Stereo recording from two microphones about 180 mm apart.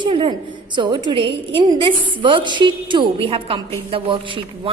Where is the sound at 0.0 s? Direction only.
30° right (ahead or behind).